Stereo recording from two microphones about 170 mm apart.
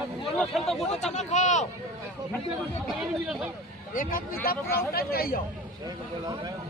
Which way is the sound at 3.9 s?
60° left (ahead or behind).